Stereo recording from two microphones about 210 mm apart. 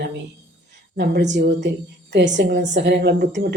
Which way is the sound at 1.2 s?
35° right (ahead or behind).